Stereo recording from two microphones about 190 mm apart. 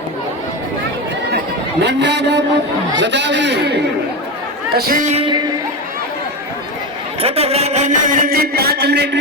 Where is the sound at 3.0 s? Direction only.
65° right (ahead or behind).